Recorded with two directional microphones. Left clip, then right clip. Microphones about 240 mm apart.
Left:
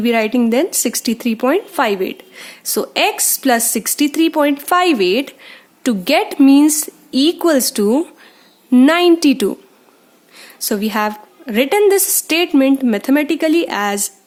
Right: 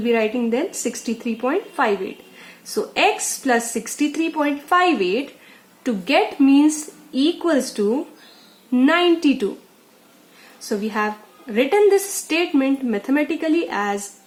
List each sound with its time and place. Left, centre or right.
0.0 s a woman's voice: left
10.7 s a woman's voice: left